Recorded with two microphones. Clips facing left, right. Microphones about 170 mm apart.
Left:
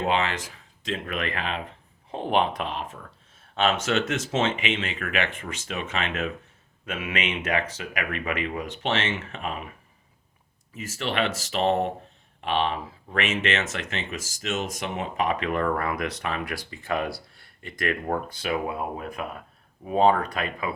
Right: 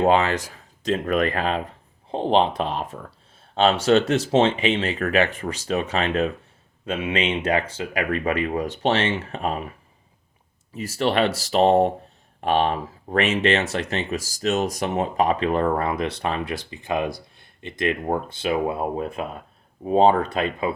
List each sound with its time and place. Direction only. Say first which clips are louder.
0.0 s speech: right 7 dB; 40° right (ahead or behind)